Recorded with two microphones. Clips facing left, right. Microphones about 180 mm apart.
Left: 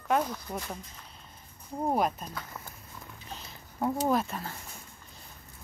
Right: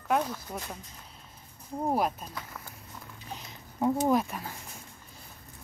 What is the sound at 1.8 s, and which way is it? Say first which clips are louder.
Speech: even; 5° right (ahead or behind).